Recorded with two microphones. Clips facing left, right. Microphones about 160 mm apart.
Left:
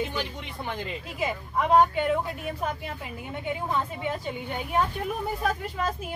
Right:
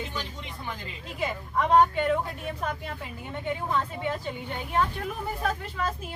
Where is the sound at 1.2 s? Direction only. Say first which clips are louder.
Even; 10° left (ahead or behind).